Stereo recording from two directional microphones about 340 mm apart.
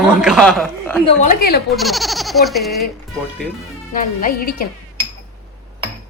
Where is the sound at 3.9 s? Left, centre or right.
Left.